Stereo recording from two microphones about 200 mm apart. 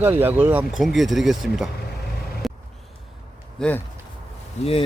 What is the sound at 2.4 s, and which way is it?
Vehicle, centre (ahead or behind).